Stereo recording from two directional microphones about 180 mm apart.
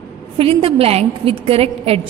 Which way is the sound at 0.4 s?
30° right (ahead or behind).